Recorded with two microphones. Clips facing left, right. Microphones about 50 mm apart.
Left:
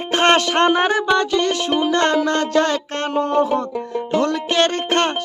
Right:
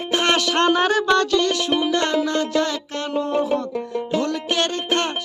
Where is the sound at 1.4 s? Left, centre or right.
Left.